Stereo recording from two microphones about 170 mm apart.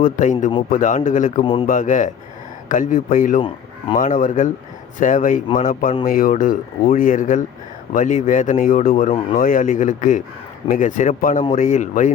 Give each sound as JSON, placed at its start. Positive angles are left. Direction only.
{"t": 0.0, "sound": "speech", "side_deg": 45}
{"t": 1.4, "sound": "a man's voice", "side_deg": 30}
{"t": 1.6, "sound": "speech", "side_deg": 50}